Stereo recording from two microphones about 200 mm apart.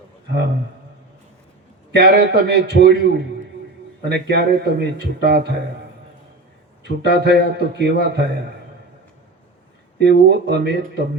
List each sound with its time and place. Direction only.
2.0 s a man's voice: 55° right (ahead or behind)
4.1 s a man's voice: 55° right (ahead or behind)
6.8 s a man's voice: 55° right (ahead or behind)
10.0 s a man's voice: 55° right (ahead or behind)